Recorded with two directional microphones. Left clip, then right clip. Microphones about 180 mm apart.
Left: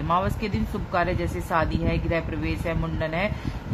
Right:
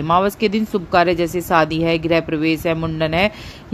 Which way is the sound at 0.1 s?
45° right (ahead or behind).